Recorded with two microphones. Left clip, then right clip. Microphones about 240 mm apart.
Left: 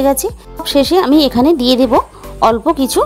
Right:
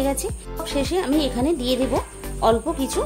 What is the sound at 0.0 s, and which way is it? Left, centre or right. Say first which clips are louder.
Speech: left 11 dB; left.